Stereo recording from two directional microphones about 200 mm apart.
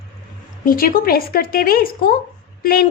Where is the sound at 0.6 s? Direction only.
45° left (ahead or behind).